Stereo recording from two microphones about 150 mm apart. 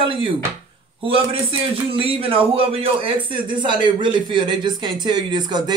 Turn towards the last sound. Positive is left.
turn(degrees=-30)  # may be behind; listen again after turning